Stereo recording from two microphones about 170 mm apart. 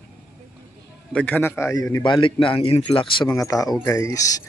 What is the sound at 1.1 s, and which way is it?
Speech, 10° left (ahead or behind).